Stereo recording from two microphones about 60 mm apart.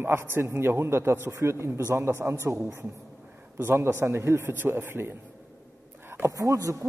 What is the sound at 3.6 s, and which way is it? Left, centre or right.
A man's voice, right.